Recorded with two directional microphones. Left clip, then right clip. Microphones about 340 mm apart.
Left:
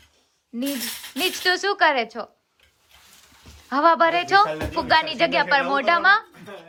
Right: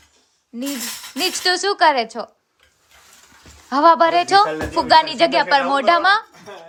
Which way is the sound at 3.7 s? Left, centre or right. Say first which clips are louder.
Right 4 dB; centre.